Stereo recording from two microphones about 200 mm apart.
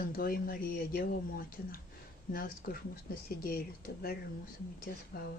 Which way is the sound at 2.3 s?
45° left (ahead or behind).